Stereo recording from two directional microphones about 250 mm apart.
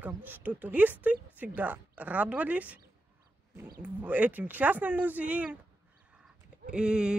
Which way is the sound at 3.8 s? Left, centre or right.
Centre.